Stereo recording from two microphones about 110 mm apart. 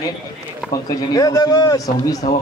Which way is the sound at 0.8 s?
35° left (ahead or behind).